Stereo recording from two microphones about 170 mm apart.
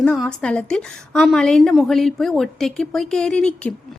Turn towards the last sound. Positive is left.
turn(degrees=5)  # may be behind; listen again after turning